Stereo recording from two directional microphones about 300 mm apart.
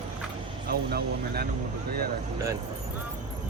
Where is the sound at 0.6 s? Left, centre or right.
Right.